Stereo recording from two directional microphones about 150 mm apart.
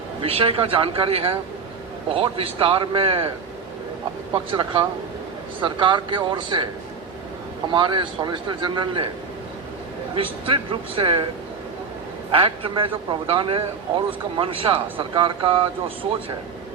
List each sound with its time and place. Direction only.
0.2 s speech: 35° right (ahead or behind)
4.5 s speech: 35° right (ahead or behind)
7.7 s speech: 35° right (ahead or behind)
10.2 s speech: 35° right (ahead or behind)
12.3 s speech: 35° right (ahead or behind)